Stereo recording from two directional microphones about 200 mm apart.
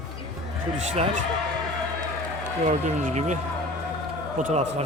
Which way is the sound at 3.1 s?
35° right (ahead or behind).